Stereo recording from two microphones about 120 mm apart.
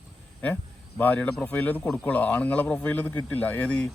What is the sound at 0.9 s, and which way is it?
Speech, 15° left (ahead or behind).